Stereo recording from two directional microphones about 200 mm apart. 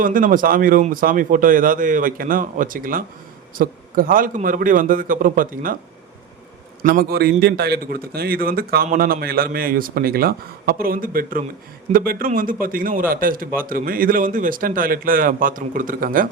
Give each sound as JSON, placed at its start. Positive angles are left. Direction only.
{"t": 0.0, "sound": "a man's voice", "side_deg": -40}
{"t": 6.8, "sound": "a man's voice", "side_deg": -50}